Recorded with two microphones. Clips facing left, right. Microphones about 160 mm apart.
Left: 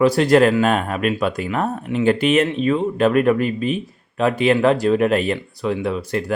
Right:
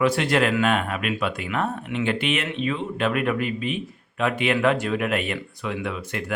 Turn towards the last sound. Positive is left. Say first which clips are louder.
# left 7 dB
turn(degrees=35)  # may be behind; listen again after turning